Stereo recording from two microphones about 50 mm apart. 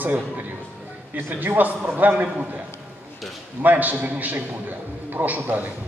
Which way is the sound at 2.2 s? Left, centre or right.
Right.